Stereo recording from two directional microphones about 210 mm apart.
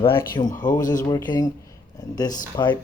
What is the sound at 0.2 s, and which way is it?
Speech, 15° left (ahead or behind).